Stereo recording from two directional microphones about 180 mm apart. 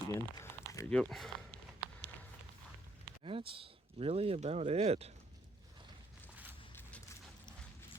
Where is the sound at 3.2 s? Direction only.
30° right (ahead or behind).